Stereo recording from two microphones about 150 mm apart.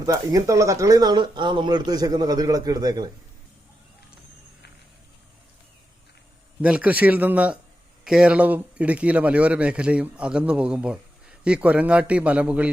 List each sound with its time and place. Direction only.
0.0 s speech: 25° right (ahead or behind)
6.6 s speech: 10° right (ahead or behind)